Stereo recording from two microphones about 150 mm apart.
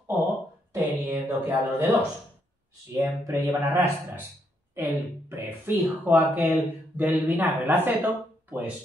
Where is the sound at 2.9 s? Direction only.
15° right (ahead or behind).